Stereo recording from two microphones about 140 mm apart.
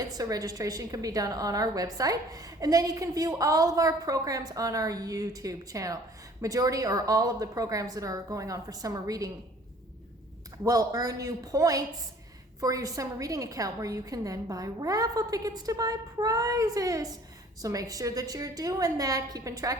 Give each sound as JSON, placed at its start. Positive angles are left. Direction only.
{"t": 0.1, "sound": "a woman's voice", "side_deg": -25}
{"t": 10.6, "sound": "a woman's voice", "side_deg": -25}